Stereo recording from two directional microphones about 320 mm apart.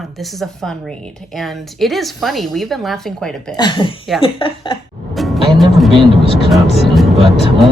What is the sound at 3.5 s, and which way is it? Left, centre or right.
Speech, centre.